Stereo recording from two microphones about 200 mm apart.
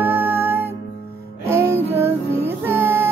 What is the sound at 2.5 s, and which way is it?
Child singing, 10° right (ahead or behind).